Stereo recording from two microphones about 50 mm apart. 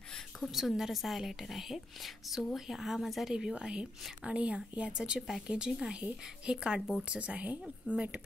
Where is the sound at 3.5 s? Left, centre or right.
Right.